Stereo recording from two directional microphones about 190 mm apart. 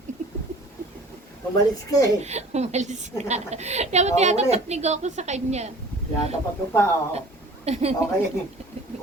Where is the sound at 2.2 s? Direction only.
35° right (ahead or behind).